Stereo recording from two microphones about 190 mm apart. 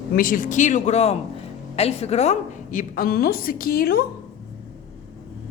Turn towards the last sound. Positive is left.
turn(degrees=50)  # may be behind; listen again after turning